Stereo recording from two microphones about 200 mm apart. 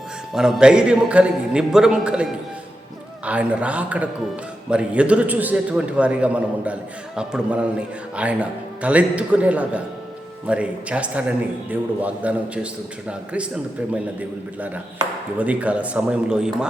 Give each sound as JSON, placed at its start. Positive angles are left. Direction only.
{"t": 0.3, "sound": "a man's voice", "side_deg": -5}
{"t": 3.2, "sound": "a man's voice", "side_deg": -5}